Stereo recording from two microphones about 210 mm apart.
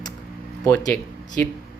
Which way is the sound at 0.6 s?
10° left (ahead or behind).